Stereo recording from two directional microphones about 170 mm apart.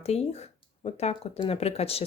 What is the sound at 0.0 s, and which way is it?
Speech, 40° left (ahead or behind).